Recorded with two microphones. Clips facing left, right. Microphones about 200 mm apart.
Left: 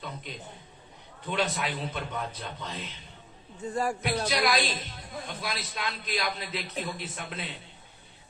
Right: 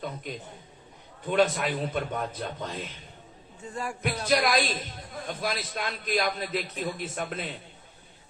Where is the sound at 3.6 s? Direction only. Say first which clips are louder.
Left 6 dB; 35° left (ahead or behind).